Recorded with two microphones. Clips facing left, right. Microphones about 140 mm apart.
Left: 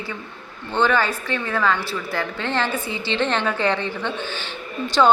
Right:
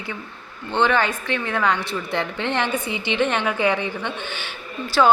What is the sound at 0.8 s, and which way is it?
A woman's voice, 15° right (ahead or behind).